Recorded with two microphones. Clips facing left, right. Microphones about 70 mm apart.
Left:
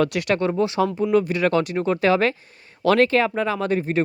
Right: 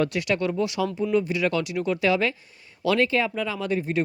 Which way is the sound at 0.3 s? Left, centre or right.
Left.